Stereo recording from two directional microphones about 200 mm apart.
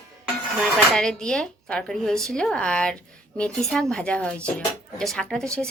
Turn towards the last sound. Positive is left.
turn(degrees=5)  # may be behind; listen again after turning